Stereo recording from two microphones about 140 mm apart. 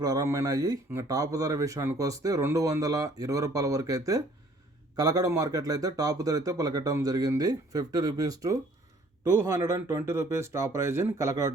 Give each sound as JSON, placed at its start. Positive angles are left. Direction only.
{"t": 0.0, "sound": "speech", "side_deg": -25}